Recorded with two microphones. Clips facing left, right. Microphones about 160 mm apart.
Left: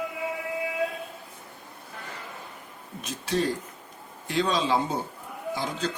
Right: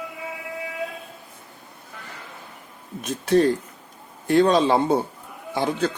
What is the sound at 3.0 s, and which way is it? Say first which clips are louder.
Speech: right 9 dB; 55° right (ahead or behind).